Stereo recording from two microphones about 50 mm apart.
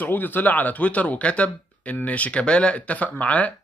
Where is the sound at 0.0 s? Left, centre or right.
Left.